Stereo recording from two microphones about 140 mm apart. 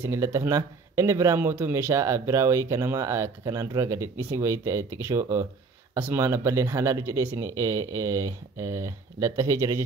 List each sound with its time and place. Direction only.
0.0 s speech: 20° right (ahead or behind)